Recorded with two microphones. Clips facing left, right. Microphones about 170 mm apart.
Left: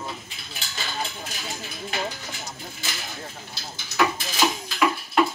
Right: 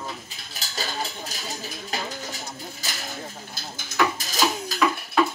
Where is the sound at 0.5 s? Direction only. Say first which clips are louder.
Right 1 dB; 35° right (ahead or behind).